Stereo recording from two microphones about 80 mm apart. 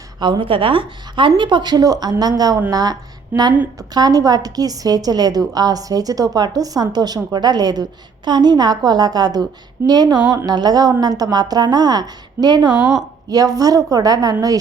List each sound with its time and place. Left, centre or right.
0.2 s a woman's voice: right